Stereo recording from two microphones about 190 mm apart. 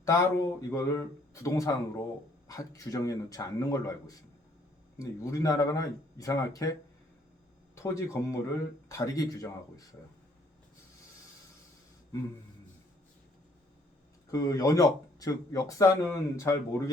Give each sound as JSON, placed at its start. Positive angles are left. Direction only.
{"t": 0.0, "sound": "speech", "side_deg": 15}
{"t": 7.8, "sound": "speech", "side_deg": 15}
{"t": 14.3, "sound": "speech", "side_deg": 15}